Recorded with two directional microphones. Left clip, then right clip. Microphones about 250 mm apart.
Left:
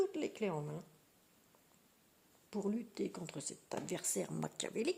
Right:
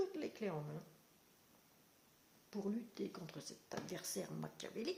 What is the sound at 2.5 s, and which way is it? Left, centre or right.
Speech, left.